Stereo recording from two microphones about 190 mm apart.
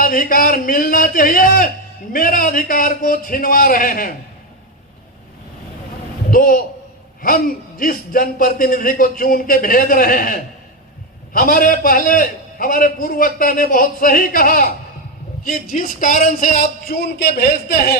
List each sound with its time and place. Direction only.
0.0 s a man's voice: 45° left (ahead or behind)
6.3 s a man's voice: 50° left (ahead or behind)